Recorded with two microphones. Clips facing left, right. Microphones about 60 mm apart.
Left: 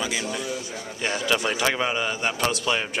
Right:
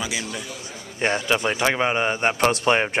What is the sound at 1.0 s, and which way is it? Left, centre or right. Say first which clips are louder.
Speech: right 5 dB; right.